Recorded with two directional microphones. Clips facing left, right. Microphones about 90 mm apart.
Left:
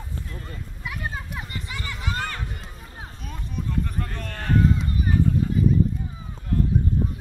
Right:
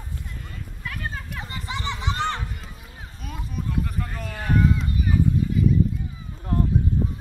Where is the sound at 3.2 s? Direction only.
5° right (ahead or behind).